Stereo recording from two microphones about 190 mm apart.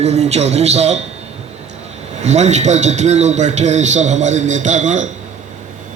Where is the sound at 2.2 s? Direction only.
35° right (ahead or behind).